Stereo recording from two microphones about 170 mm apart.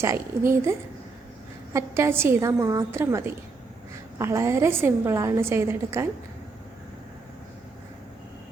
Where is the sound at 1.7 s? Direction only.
15° right (ahead or behind).